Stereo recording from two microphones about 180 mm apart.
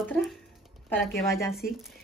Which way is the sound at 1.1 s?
15° left (ahead or behind).